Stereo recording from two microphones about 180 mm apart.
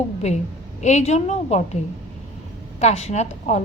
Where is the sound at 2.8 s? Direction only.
40° left (ahead or behind).